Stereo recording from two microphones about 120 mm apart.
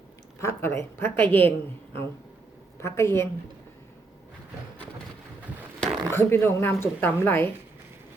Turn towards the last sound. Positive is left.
turn(degrees=20)  # may be behind; listen again after turning